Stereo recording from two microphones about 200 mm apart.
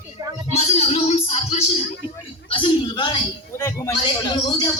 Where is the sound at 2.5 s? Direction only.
25° left (ahead or behind).